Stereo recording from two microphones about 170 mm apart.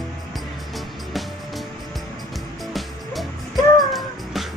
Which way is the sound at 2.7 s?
Centre (ahead or behind).